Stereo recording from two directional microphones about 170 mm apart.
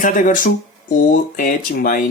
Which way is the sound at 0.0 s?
50° left (ahead or behind).